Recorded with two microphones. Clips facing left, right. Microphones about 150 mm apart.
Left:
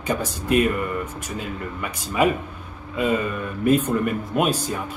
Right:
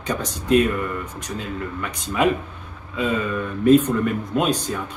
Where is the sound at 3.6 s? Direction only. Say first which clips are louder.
Right 4 dB; 10° left (ahead or behind).